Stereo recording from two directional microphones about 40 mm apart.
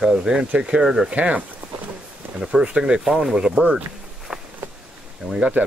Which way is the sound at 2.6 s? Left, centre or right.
Right.